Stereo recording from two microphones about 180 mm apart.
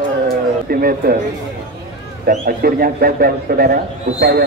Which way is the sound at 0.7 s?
55° right (ahead or behind).